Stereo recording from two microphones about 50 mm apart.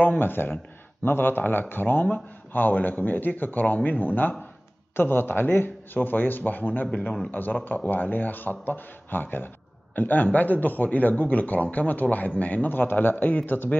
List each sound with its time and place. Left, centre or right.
0.2 s a man's voice: left
6.9 s speech: left
7.2 s a man's voice: left